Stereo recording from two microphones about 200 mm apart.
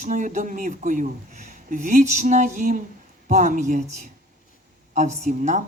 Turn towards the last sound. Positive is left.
turn(degrees=-35)  # may be behind; listen again after turning